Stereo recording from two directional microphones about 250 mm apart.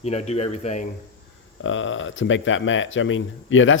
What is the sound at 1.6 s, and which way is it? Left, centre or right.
Speech, left.